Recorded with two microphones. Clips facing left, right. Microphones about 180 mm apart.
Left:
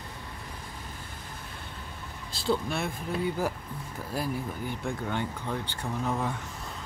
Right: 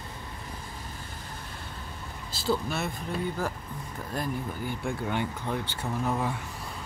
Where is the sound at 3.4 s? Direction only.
10° left (ahead or behind).